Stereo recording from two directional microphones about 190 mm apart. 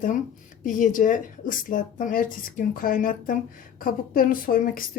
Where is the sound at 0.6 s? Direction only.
45° left (ahead or behind).